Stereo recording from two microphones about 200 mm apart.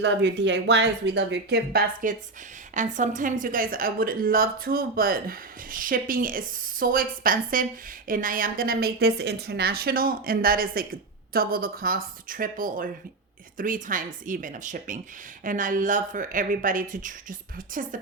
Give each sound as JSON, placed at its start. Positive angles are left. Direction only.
{"t": 0.0, "sound": "a woman's voice", "side_deg": -60}